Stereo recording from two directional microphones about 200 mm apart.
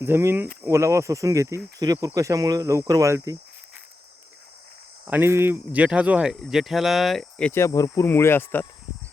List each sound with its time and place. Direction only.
0.0 s speech: 10° right (ahead or behind)
5.0 s speech: 10° right (ahead or behind); by 8.6 s 10° left (ahead or behind)